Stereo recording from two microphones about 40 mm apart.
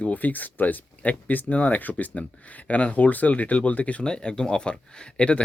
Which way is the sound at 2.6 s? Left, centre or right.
Left.